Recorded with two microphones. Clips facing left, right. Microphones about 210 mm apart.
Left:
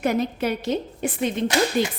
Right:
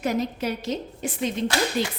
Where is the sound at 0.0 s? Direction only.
60° left (ahead or behind).